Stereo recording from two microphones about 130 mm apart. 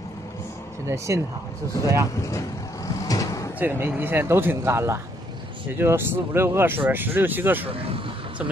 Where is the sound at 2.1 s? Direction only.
25° left (ahead or behind).